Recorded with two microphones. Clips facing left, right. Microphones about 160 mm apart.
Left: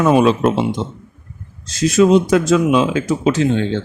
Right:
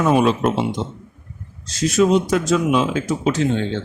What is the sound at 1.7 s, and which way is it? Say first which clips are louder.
A man's voice: left 4 dB; 90° left.